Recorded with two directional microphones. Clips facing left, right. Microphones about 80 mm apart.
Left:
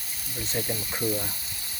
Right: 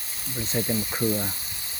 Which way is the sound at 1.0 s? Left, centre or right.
Right.